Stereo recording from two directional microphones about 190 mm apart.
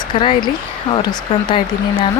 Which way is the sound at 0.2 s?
25° left (ahead or behind).